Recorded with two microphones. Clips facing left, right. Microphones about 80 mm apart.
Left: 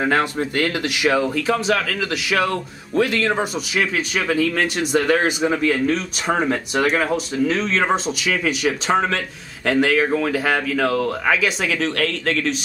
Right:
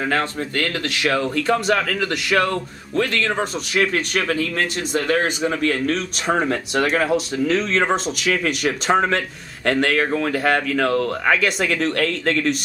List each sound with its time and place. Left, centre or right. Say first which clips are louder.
0.0 s speech: left 3 dB; centre
5.2 s speech: left 2 dB; centre